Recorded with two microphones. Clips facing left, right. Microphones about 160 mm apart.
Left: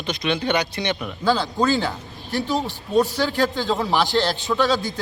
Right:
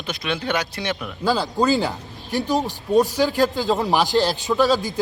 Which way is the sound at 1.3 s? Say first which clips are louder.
Right 5 dB; 10° right (ahead or behind).